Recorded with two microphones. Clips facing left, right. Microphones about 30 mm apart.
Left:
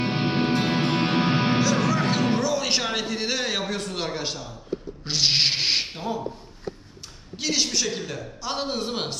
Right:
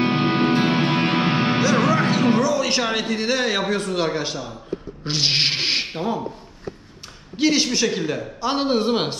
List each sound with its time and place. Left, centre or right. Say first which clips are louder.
0.1 s music: right 5 dB; right
1.6 s music: right 4 dB; centre
2.3 s a sound: right 4 dB; centre
2.8 s speech: right 4 dB; centre
5.9 s a man's voice: right 5 dB; right
7.3 s a man's voice: right 6 dB; centre